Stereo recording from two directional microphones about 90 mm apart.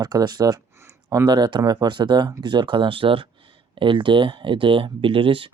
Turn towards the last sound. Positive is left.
turn(degrees=-70)  # may be behind; listen again after turning